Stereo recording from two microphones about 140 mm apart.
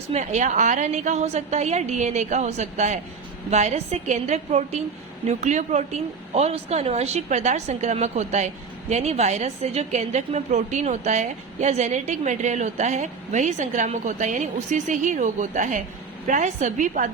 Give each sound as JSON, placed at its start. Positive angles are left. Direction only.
{"t": 0.1, "sound": "a woman's voice", "side_deg": -55}